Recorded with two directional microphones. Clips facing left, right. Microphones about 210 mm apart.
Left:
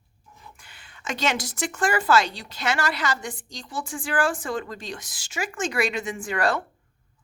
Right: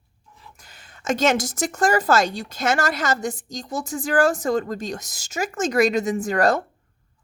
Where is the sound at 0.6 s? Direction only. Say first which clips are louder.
Right 7 dB; 40° right (ahead or behind).